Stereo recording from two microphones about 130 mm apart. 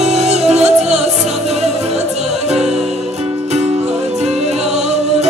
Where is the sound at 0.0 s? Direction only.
60° right (ahead or behind).